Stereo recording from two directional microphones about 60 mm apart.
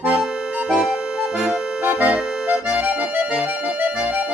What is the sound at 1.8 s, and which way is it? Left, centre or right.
Accordion, right.